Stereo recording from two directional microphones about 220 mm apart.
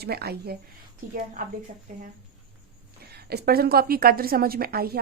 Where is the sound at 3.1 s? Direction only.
45° right (ahead or behind).